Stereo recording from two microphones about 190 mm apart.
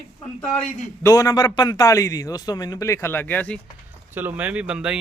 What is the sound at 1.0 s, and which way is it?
A man's voice, 15° left (ahead or behind).